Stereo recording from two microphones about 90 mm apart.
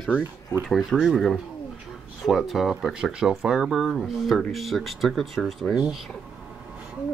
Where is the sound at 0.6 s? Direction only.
Centre (ahead or behind).